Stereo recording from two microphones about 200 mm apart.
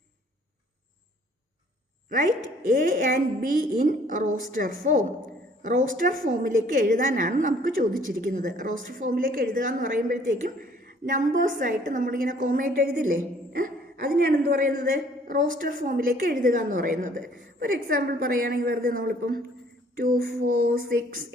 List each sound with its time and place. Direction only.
2.0 s a woman's voice: 40° right (ahead or behind)